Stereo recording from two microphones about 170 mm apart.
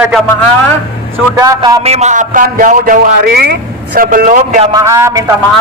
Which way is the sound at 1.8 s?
40° right (ahead or behind).